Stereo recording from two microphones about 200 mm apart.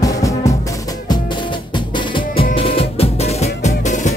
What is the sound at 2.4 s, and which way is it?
Music, 30° left (ahead or behind).